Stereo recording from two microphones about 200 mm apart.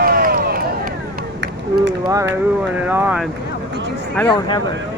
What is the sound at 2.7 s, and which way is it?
Vehicle, 10° right (ahead or behind).